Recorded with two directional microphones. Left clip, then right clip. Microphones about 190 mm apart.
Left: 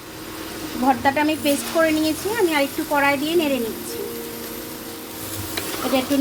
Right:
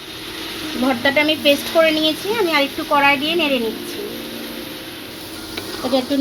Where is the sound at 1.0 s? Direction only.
40° right (ahead or behind).